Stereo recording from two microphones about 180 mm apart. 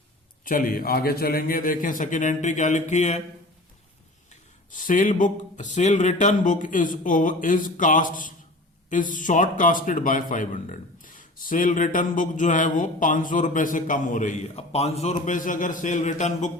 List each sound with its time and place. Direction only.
0.4 s speech: 50° left (ahead or behind)
4.7 s speech: 50° left (ahead or behind)
15.2 s speech: 45° left (ahead or behind)